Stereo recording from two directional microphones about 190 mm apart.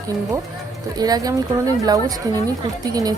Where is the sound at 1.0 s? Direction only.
20° right (ahead or behind).